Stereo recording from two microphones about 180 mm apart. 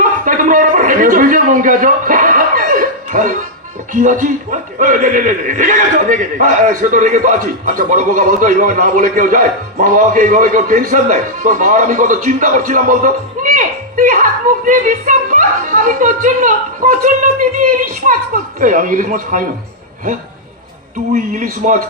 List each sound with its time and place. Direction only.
0.3 s a sound: 50° right (ahead or behind)
3.9 s speech: 45° right (ahead or behind)
21.1 s speech: 45° right (ahead or behind)